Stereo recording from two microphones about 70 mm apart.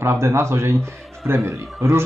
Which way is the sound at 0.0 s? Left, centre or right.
Right.